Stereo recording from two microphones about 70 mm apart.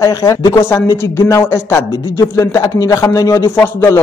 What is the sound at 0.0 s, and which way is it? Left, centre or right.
Speech, left.